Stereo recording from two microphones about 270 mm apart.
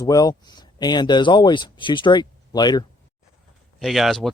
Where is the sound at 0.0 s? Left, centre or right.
Centre.